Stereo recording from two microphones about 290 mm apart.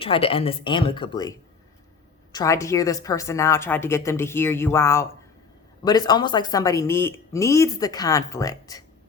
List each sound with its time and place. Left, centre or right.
0.0 s speech: centre
2.3 s speech: centre